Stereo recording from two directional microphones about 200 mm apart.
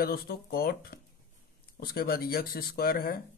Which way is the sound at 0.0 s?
50° left (ahead or behind).